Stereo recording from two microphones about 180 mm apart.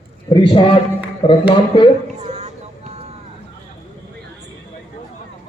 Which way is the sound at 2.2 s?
40° right (ahead or behind).